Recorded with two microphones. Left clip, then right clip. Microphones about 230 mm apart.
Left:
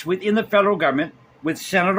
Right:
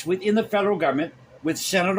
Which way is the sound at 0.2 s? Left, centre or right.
Centre.